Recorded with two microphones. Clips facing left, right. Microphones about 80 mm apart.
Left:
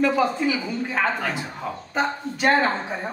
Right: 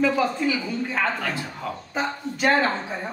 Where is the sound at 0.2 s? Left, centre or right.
Centre.